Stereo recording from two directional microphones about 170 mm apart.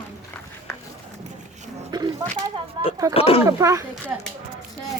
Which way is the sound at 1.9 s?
25° right (ahead or behind).